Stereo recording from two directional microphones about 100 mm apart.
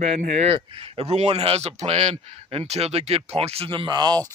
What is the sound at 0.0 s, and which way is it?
A man's voice, 90° right.